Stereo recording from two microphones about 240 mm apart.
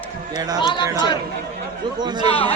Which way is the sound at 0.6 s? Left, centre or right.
Centre.